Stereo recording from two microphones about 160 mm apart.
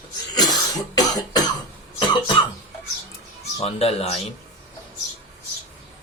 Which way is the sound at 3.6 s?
40° left (ahead or behind).